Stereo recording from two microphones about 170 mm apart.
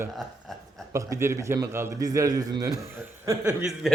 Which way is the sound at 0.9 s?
15° right (ahead or behind).